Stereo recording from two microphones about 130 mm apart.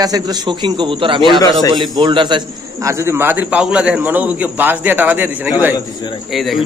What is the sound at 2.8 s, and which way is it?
A man's voice, 20° right (ahead or behind).